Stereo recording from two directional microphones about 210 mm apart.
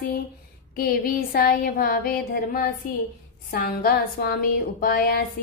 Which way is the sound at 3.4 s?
45° left (ahead or behind).